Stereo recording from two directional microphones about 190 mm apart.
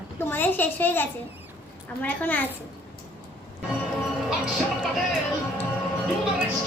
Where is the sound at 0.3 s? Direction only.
10° left (ahead or behind).